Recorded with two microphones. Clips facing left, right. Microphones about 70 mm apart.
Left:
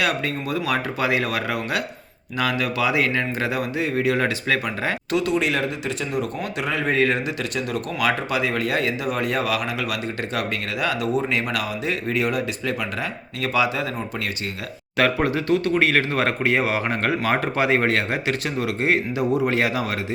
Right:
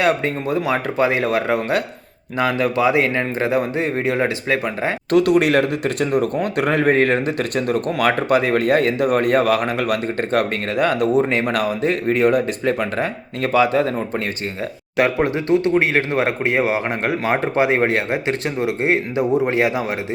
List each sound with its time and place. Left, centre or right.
0.0 s speech: right
5.1 s speech: right
14.9 s speech: right